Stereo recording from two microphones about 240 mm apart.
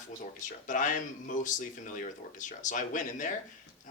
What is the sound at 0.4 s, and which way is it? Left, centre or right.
Speech, left.